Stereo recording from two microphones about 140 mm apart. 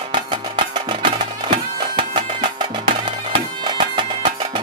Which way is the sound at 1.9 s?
35° right (ahead or behind).